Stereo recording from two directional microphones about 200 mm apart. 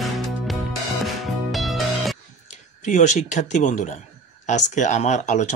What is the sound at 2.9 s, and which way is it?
Speech, 35° left (ahead or behind).